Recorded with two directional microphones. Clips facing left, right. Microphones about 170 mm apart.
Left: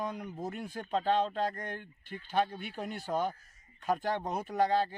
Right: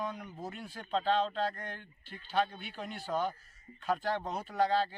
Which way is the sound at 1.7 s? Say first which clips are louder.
Left 5 dB; 50° left (ahead or behind).